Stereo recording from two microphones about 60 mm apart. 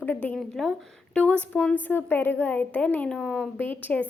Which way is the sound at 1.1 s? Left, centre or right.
Left.